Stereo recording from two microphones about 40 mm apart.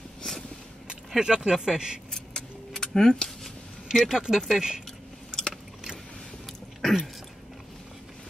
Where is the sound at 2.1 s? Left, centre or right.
Centre.